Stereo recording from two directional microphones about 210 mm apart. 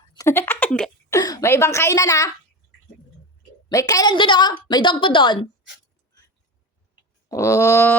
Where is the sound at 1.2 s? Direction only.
15° left (ahead or behind).